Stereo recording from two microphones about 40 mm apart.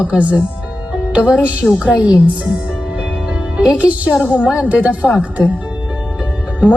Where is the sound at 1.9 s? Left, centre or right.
Right.